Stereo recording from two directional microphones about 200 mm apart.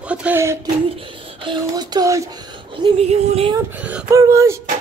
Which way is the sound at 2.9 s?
30° right (ahead or behind).